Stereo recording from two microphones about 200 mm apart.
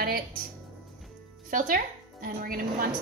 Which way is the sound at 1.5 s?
40° right (ahead or behind).